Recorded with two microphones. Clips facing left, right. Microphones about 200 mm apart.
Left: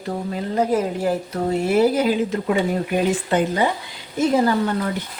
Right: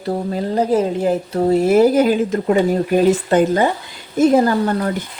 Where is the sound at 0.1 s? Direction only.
35° right (ahead or behind).